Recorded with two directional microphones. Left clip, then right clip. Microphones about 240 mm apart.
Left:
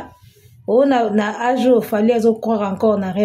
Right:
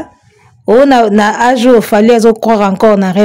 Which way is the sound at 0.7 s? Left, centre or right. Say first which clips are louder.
Right 9 dB; right.